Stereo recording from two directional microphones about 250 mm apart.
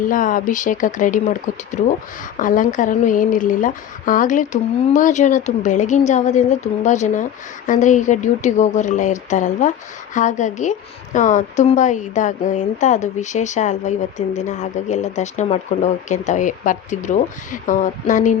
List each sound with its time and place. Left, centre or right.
0.1 s a woman's voice: left